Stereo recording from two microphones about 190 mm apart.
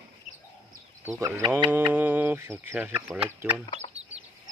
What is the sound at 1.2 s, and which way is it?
Speech, 15° right (ahead or behind).